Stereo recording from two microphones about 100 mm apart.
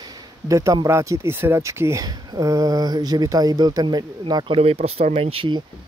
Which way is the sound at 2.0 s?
40° right (ahead or behind).